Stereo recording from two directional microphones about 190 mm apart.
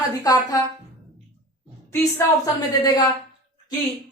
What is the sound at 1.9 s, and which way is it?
A woman's voice, 15° left (ahead or behind).